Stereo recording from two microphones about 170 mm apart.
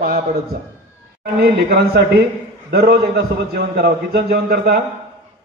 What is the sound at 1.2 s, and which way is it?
A man's voice, 60° right (ahead or behind).